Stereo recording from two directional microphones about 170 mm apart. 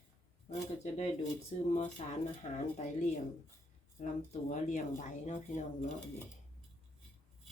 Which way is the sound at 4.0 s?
45° left (ahead or behind).